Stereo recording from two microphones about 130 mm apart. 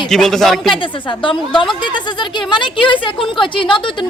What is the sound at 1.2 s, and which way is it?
Speech, 40° left (ahead or behind).